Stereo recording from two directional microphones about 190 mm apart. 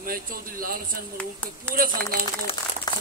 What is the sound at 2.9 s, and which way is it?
Crumpling, 20° left (ahead or behind).